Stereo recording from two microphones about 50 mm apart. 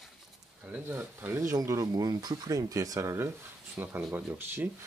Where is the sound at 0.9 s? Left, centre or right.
Right.